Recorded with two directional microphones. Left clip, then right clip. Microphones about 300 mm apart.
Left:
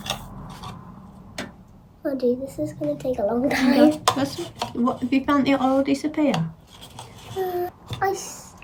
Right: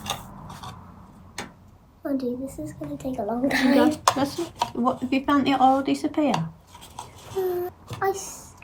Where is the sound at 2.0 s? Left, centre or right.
Centre.